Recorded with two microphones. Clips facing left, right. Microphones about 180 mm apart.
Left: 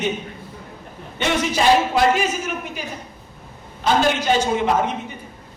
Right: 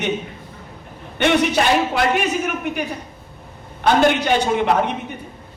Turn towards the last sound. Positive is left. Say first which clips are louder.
# right 1 dB
turn(degrees=-65)  # may be behind; listen again after turning